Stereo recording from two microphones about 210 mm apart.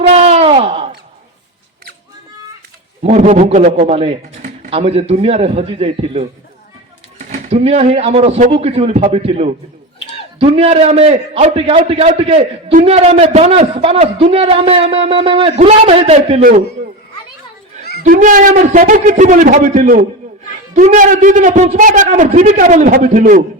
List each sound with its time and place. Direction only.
0.0 s a sound: 30° right (ahead or behind)
3.0 s a man's voice: 35° right (ahead or behind)
7.3 s a man's voice: 30° right (ahead or behind)
16.4 s a man's voice: 40° right (ahead or behind)
18.0 s a man's voice: 40° right (ahead or behind)